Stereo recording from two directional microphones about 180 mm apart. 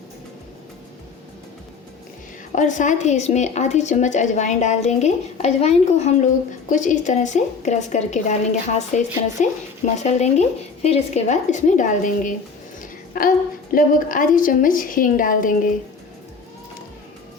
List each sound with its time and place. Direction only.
2.6 s a woman's voice: 45° left (ahead or behind)
12.8 s a sound: 55° left (ahead or behind)
13.7 s a woman's voice: 50° left (ahead or behind)